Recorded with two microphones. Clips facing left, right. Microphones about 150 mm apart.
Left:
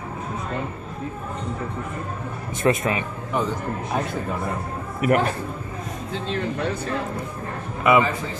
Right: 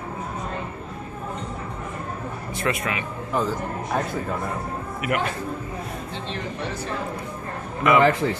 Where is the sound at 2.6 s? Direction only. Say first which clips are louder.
Left 5 dB; 25° left (ahead or behind).